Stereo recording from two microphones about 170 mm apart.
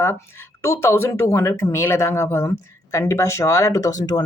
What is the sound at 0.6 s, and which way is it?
Speech, 15° left (ahead or behind).